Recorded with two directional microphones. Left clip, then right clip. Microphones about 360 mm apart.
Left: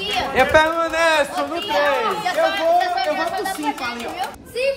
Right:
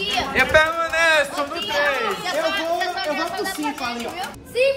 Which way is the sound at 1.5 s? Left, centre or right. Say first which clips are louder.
Left 3 dB; left.